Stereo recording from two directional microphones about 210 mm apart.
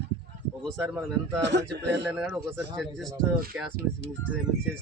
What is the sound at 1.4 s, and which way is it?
Speech, 55° right (ahead or behind).